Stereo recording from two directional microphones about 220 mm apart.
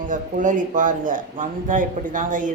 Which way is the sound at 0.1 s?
35° right (ahead or behind).